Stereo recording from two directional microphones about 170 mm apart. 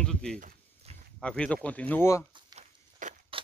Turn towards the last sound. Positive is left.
turn(degrees=-45)  # may be behind; listen again after turning